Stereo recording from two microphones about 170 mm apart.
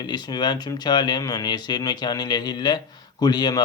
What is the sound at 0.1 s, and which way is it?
Speech, 25° left (ahead or behind).